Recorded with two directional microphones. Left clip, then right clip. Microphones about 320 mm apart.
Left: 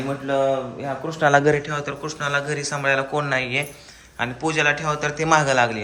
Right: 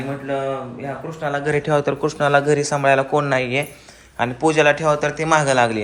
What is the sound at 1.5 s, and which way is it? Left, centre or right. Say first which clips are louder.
A man's voice: right 6 dB; centre.